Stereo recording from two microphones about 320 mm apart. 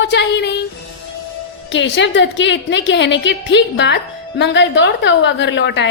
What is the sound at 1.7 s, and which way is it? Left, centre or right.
A woman's voice, left.